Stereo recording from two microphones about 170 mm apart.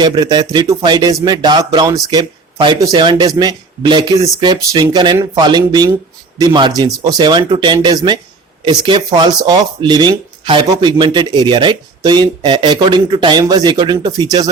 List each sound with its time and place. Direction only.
0.0 s speech: 25° right (ahead or behind)